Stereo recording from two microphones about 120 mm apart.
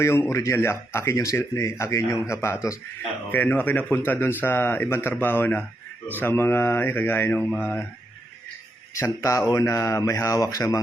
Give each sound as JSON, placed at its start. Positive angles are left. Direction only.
{"t": 0.0, "sound": "a man's voice", "side_deg": 20}
{"t": 9.0, "sound": "speech", "side_deg": 25}